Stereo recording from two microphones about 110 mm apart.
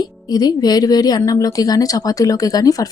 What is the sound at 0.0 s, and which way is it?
Speech, 40° left (ahead or behind).